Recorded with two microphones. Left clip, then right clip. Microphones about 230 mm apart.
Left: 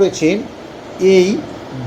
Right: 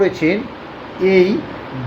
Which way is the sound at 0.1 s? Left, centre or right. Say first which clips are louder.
Left 2 dB; centre.